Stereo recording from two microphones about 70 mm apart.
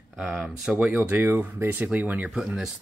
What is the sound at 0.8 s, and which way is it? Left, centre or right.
Speech, right.